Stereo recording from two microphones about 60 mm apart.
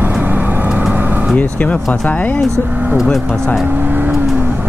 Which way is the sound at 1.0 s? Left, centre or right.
Right.